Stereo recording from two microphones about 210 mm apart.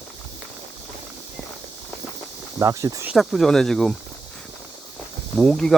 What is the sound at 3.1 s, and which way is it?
Speech, centre (ahead or behind).